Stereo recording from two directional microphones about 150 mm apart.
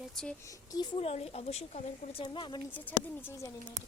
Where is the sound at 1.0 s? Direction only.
45° left (ahead or behind).